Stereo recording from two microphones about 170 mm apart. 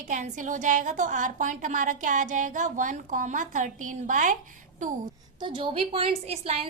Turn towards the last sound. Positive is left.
turn(degrees=-40)  # may be behind; listen again after turning